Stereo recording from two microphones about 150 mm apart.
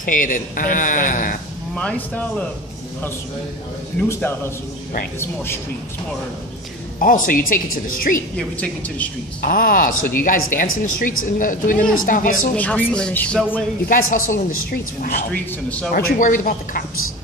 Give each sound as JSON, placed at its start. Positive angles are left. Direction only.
{"t": 0.0, "sound": "speech", "side_deg": 65}
{"t": 1.8, "sound": "speech", "side_deg": 10}
{"t": 4.0, "sound": "speech", "side_deg": 15}
{"t": 5.2, "sound": "speech", "side_deg": 15}
{"t": 7.0, "sound": "speech", "side_deg": 70}
{"t": 8.4, "sound": "speech", "side_deg": 10}
{"t": 9.4, "sound": "speech", "side_deg": 75}
{"t": 12.5, "sound": "speech", "side_deg": 10}
{"t": 13.8, "sound": "speech", "side_deg": 70}
{"t": 15.3, "sound": "speech", "side_deg": 10}
{"t": 15.9, "sound": "speech", "side_deg": 75}